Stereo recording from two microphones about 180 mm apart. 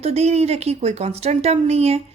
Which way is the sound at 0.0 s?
35° right (ahead or behind).